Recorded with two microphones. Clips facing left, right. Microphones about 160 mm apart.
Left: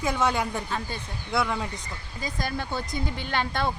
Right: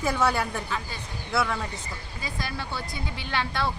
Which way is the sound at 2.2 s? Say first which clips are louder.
Left 4 dB; 45° left (ahead or behind).